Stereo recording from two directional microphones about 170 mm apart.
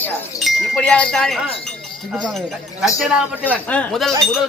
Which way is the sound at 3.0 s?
5° right (ahead or behind).